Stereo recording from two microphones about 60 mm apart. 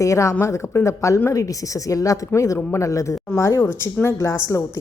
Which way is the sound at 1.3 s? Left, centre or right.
Left.